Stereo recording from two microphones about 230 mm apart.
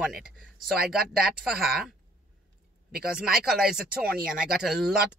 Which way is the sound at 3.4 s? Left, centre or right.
Centre.